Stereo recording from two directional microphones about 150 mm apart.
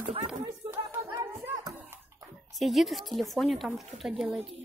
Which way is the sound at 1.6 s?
25° right (ahead or behind).